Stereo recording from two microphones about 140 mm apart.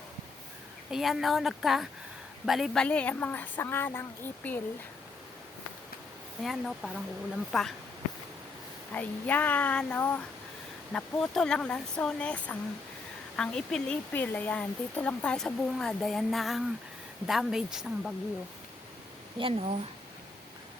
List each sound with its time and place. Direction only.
0.9 s speech: centre (ahead or behind); by 4.6 s 15° left (ahead or behind)
6.4 s speech: centre (ahead or behind)
8.9 s speech: 10° left (ahead or behind); by 18.1 s 5° right (ahead or behind)
19.4 s speech: 40° right (ahead or behind)